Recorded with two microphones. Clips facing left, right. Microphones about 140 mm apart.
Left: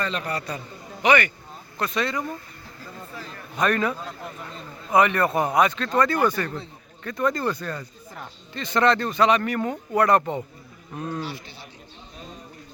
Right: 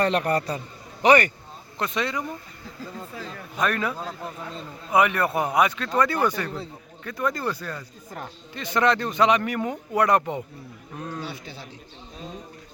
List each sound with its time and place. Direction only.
0.0 s a man's voice: 65° right (ahead or behind)
1.0 s speech: 40° right (ahead or behind)
1.8 s speech: 20° right (ahead or behind)
3.6 s speech: 5° right (ahead or behind)
10.9 s speech: centre (ahead or behind)